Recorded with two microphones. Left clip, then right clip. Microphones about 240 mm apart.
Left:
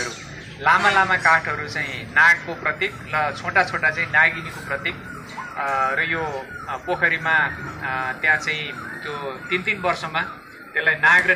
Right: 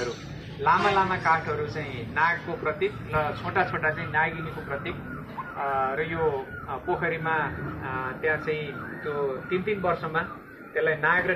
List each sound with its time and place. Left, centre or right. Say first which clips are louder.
0.7 s a man's voice: left 6 dB; left